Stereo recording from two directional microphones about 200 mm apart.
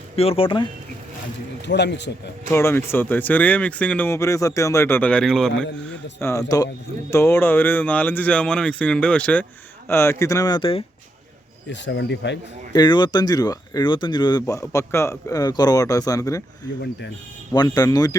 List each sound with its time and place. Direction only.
0.2 s speech: 30° left (ahead or behind)
1.6 s speech: 60° left (ahead or behind)
2.5 s speech: 10° left (ahead or behind)
6.1 s speech: 15° left (ahead or behind)
11.7 s speech: 60° left (ahead or behind)
12.7 s speech: 20° left (ahead or behind)
17.5 s speech: 20° left (ahead or behind)